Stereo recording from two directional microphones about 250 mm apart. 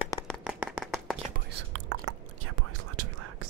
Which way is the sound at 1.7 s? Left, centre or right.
Right.